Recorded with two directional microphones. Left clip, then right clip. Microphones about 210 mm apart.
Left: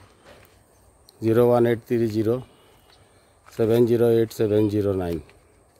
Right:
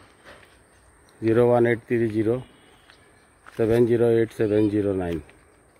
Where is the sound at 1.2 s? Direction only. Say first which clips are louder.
Even; 10° left (ahead or behind).